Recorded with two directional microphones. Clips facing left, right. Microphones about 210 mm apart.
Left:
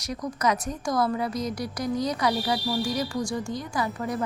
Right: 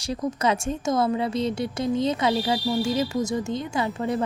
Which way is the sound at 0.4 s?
25° right (ahead or behind).